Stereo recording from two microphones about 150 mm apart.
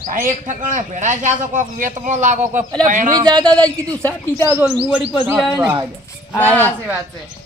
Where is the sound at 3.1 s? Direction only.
25° right (ahead or behind).